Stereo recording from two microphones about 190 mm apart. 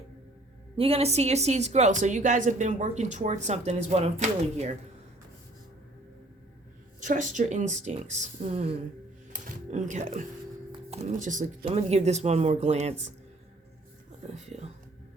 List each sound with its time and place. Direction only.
0.8 s speech: 30° right (ahead or behind)
7.0 s speech: 45° right (ahead or behind)
10.7 s music: 35° right (ahead or behind)
11.6 s speech: 35° right (ahead or behind)
14.3 s speech: 35° right (ahead or behind)